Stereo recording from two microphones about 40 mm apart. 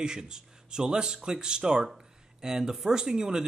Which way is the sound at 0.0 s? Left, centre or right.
Centre.